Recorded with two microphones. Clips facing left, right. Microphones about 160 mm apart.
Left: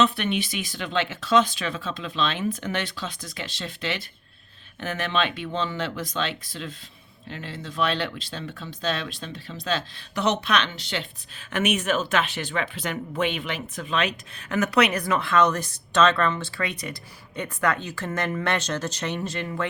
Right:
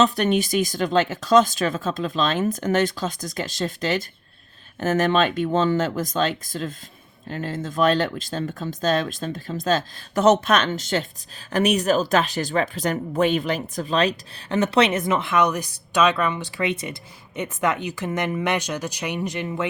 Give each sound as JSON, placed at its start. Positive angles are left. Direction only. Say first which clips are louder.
{"t": 0.0, "sound": "speech", "louder": "right 4 dB", "side_deg": -40}